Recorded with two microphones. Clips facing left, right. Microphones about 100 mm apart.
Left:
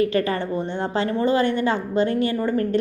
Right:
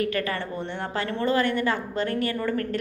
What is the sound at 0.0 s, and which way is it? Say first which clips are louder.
A woman's voice: left 6 dB; 25° left (ahead or behind).